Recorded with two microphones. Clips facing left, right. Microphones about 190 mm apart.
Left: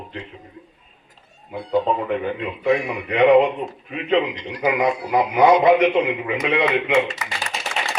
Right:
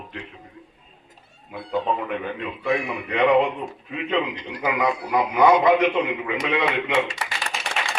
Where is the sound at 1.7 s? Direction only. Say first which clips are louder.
Left 4 dB; 25° left (ahead or behind).